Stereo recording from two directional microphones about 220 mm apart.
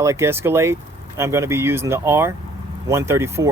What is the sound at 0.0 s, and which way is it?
Speech, 10° right (ahead or behind).